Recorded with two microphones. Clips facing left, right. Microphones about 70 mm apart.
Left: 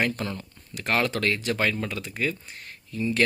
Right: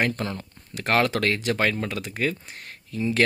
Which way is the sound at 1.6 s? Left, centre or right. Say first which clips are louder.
Right 2 dB; right.